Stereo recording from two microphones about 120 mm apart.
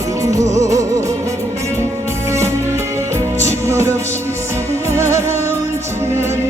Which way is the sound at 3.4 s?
25° right (ahead or behind).